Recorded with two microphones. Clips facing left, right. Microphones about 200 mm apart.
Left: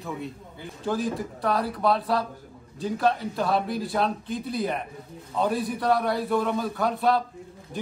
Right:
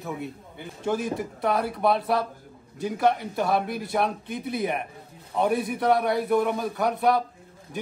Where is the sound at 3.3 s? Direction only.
20° right (ahead or behind).